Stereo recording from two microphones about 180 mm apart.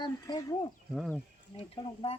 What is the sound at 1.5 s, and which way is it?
Speech, 30° left (ahead or behind).